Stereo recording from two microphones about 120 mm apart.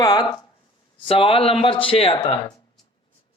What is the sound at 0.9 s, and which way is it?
Speech, 50° left (ahead or behind).